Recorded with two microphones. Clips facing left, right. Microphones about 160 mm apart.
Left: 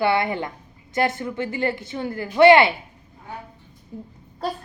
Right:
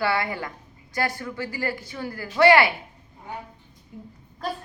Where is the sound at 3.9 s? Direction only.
30° left (ahead or behind).